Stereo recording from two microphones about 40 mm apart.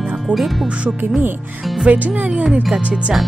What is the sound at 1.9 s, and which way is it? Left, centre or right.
Speech, right.